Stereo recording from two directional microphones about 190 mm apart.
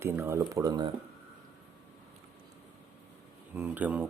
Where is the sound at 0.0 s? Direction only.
15° right (ahead or behind).